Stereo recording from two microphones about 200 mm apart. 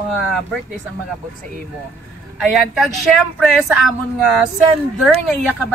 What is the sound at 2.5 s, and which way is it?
Speech, centre (ahead or behind).